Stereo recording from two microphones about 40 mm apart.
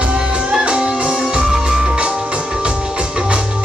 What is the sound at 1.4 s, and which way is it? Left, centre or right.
Music, centre.